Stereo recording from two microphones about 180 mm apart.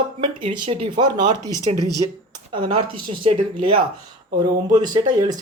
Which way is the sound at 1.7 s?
35° right (ahead or behind).